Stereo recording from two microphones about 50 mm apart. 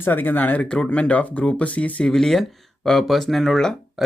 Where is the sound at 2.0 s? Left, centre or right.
Centre.